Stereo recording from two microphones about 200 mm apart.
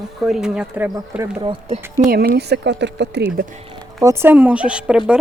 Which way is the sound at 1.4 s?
25° right (ahead or behind).